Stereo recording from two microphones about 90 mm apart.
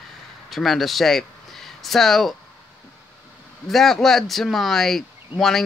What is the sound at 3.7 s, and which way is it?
Speech, 5° left (ahead or behind).